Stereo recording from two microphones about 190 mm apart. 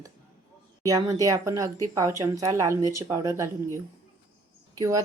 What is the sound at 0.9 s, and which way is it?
A woman's voice, 15° right (ahead or behind).